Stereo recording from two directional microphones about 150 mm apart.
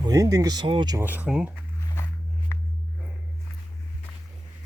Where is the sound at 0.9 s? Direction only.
10° right (ahead or behind).